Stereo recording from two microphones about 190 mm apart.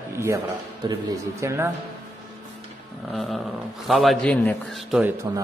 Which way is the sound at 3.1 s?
Centre (ahead or behind).